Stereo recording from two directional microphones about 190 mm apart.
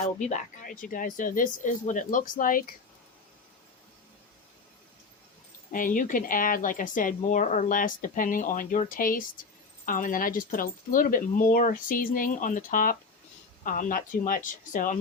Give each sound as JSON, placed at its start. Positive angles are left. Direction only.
{"t": 0.0, "sound": "speech", "side_deg": 40}
{"t": 5.7, "sound": "speech", "side_deg": 45}